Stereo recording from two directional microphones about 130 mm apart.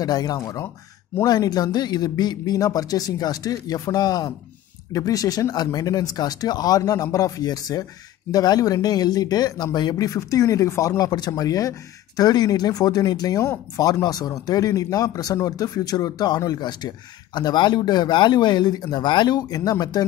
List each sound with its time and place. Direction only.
0.0 s speech: 30° left (ahead or behind)